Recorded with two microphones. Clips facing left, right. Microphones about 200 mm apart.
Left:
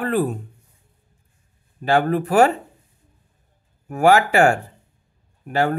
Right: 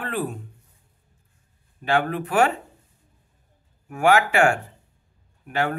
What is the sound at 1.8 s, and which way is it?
Speech, 40° left (ahead or behind).